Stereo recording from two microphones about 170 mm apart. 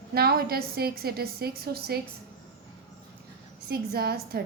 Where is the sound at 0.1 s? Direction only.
65° right (ahead or behind).